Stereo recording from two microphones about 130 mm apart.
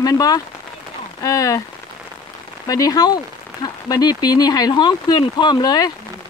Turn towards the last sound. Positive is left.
turn(degrees=30)  # may be behind; listen again after turning